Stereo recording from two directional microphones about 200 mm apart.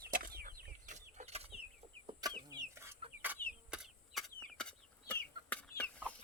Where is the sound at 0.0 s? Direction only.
45° right (ahead or behind).